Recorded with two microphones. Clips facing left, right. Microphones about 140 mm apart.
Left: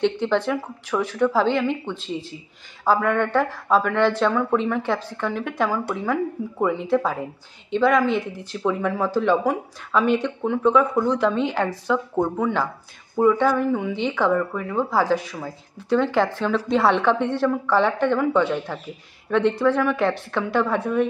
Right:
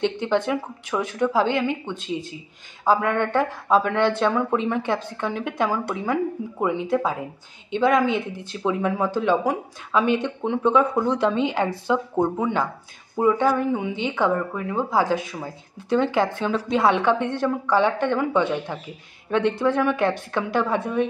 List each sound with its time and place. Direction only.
0.0 s speech: 20° right (ahead or behind)
13.1 s speech: 10° right (ahead or behind)